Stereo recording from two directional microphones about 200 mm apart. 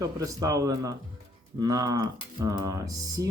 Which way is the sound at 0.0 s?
15° right (ahead or behind).